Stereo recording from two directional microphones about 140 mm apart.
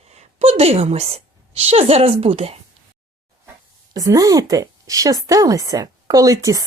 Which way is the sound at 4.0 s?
25° right (ahead or behind).